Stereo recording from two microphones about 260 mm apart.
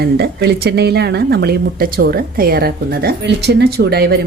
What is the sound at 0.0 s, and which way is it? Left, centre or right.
Speech, right.